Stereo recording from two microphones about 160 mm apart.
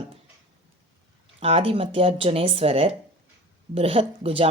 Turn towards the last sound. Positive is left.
turn(degrees=-35)  # may be behind; listen again after turning